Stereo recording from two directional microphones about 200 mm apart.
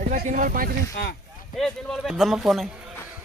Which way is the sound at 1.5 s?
Centre (ahead or behind).